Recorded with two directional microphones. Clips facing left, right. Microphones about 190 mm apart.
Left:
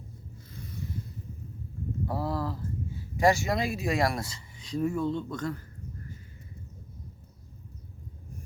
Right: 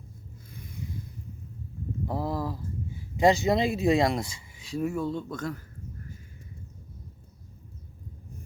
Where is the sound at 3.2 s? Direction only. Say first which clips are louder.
Right 3 dB; 20° right (ahead or behind).